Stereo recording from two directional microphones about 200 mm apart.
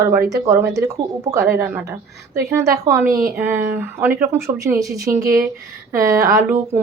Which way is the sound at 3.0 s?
45° right (ahead or behind).